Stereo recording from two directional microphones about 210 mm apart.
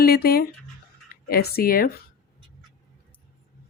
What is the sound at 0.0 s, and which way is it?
Speech, 45° left (ahead or behind).